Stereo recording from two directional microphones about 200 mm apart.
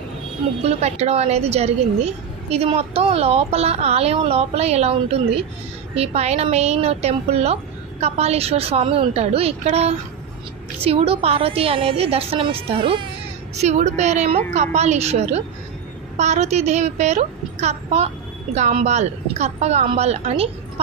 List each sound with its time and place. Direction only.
0.7 s a woman's voice: 35° right (ahead or behind)